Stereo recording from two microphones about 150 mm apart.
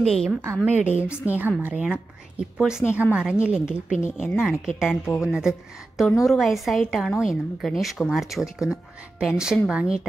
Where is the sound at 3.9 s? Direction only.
55° left (ahead or behind).